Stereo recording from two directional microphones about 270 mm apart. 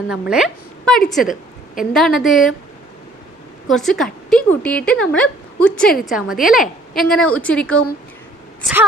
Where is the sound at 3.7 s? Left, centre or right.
Centre.